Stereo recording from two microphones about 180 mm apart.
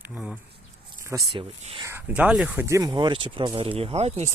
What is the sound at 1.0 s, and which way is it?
Speech, 25° right (ahead or behind).